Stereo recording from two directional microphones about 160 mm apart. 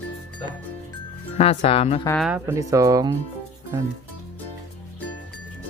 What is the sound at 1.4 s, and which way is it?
Speech, 40° left (ahead or behind).